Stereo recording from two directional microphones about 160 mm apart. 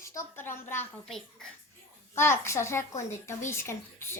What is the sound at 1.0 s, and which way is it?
Speech, 5° left (ahead or behind).